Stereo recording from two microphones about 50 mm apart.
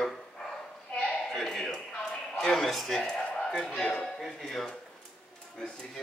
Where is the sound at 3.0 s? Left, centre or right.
Centre.